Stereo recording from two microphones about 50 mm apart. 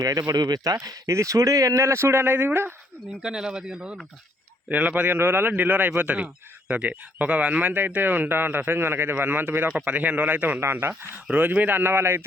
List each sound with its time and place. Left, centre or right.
0.8 s speech: right
3.2 s speech: centre
4.7 s speech: right
5.1 s speech: right
9.1 s speech: right
9.6 s speech: right
10.6 s speech: right
11.3 s speech: right
11.8 s speech: right